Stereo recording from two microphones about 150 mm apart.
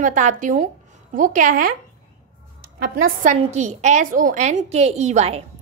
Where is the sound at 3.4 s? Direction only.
50° right (ahead or behind).